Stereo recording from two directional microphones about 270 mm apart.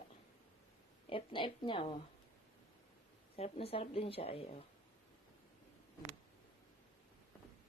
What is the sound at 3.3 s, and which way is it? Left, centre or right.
Speech, left.